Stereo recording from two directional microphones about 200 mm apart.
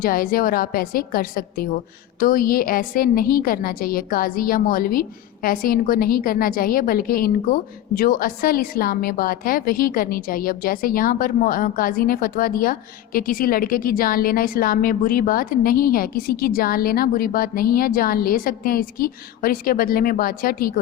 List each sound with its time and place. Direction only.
0.0 s a woman's voice: 45° left (ahead or behind)